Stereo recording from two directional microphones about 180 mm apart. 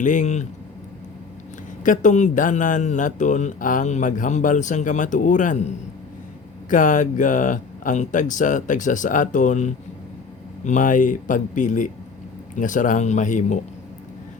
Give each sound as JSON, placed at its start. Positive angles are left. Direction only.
{"t": 0.0, "sound": "a man's voice", "side_deg": 45}
{"t": 1.8, "sound": "a man's voice", "side_deg": 45}